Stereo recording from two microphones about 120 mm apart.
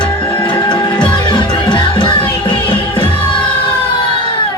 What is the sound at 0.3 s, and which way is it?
Music, 40° left (ahead or behind).